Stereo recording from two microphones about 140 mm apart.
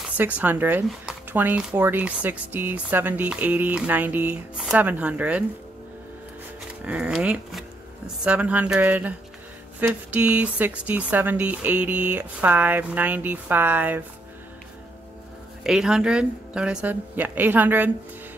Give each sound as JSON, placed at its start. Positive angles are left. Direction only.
{"t": 0.2, "sound": "speech", "side_deg": -15}
{"t": 6.9, "sound": "speech", "side_deg": -5}
{"t": 15.6, "sound": "speech", "side_deg": -5}